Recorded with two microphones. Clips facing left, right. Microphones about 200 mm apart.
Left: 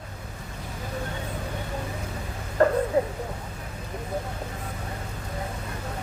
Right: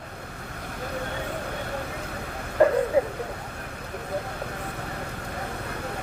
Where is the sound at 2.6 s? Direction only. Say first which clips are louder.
Right 1 dB; 10° right (ahead or behind).